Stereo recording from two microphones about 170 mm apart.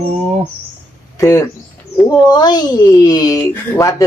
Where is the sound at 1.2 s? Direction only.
20° left (ahead or behind).